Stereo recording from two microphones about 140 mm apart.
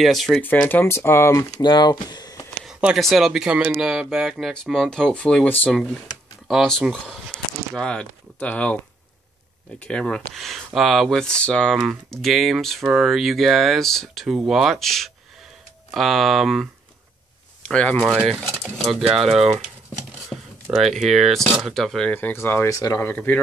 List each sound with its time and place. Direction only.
0.0 s speech: centre (ahead or behind)
0.4 s speech: 15° left (ahead or behind)
1.6 s speech: 30° left (ahead or behind)
2.6 s speech: 5° right (ahead or behind)
9.8 s speech: 10° left (ahead or behind)
17.6 s speech: 10° left (ahead or behind)
20.3 s a sound: 25° left (ahead or behind)
20.8 s speech: centre (ahead or behind)
22.1 s speech: 15° left (ahead or behind)
23.0 s speech: 15° left (ahead or behind)